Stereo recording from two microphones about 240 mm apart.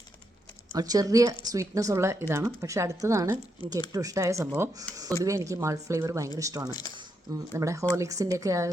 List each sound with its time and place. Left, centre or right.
0.7 s speech: centre
6.7 s speech: centre
6.9 s speech: centre